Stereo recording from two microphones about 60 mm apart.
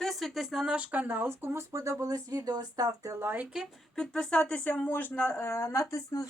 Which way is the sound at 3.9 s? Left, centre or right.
Centre.